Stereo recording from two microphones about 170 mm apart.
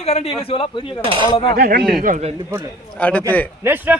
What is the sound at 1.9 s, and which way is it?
Speech, 50° right (ahead or behind).